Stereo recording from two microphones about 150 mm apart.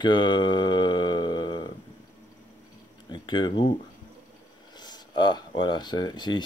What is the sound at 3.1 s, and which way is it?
Speech, 30° left (ahead or behind).